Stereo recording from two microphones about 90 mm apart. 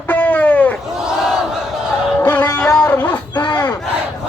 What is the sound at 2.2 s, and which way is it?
Music, 20° left (ahead or behind).